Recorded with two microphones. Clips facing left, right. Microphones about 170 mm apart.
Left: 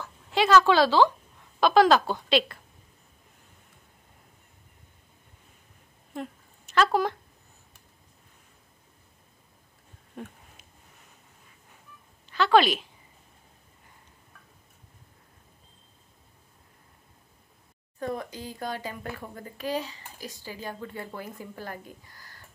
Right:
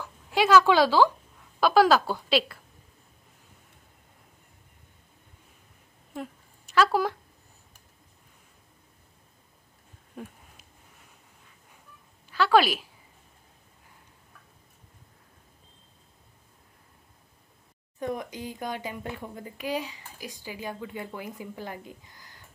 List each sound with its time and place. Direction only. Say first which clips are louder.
0.0 s a woman's voice: even; 10° right (ahead or behind)
6.7 s speech: even; 5° right (ahead or behind)
12.3 s a woman's voice: left 1 dB; 5° right (ahead or behind)
17.9 s speech: even; 15° right (ahead or behind)